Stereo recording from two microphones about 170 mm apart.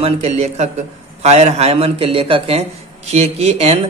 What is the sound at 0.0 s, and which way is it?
Speech, 40° right (ahead or behind).